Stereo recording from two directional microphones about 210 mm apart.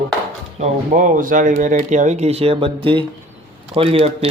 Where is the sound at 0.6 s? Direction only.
35° right (ahead or behind).